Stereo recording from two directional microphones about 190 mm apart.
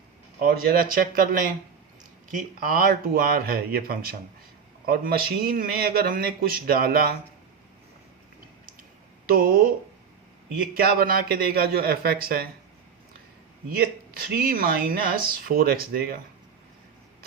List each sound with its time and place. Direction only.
0.3 s speech: 50° right (ahead or behind)
9.2 s speech: 50° right (ahead or behind)
13.7 s speech: 50° right (ahead or behind)